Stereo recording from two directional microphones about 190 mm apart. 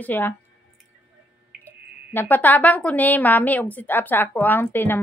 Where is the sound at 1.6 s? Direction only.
10° left (ahead or behind).